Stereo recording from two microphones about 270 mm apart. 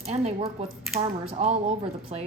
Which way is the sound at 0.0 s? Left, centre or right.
Right.